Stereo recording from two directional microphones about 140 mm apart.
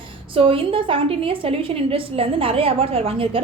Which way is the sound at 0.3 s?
40° right (ahead or behind).